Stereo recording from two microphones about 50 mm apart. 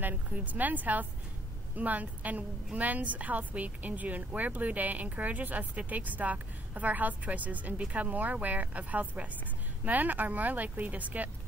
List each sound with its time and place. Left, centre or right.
0.0 s a woman's voice: right